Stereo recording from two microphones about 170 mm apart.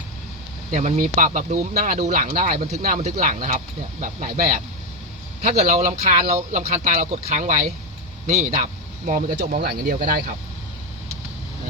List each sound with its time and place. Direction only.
0.7 s speech: 45° right (ahead or behind)
9.6 s speech: 60° right (ahead or behind)